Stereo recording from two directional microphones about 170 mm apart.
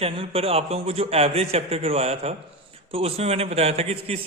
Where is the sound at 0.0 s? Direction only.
35° right (ahead or behind).